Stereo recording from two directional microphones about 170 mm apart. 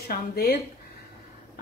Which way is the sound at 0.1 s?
65° left (ahead or behind).